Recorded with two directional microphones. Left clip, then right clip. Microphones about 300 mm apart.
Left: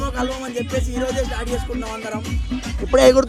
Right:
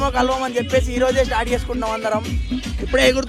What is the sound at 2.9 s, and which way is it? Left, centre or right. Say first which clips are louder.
Speech: left 4 dB; left.